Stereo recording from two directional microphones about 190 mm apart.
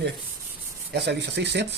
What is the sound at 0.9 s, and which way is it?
Rub, 60° right (ahead or behind).